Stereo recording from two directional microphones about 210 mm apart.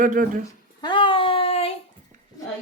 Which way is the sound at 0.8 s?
20° left (ahead or behind).